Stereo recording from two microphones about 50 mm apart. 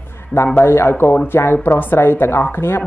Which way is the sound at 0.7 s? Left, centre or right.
Left.